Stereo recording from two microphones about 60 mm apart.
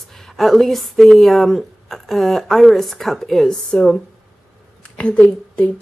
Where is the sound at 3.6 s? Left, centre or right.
Centre.